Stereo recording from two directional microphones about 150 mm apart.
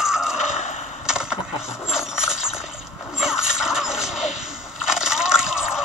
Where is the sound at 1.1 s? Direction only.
5° right (ahead or behind).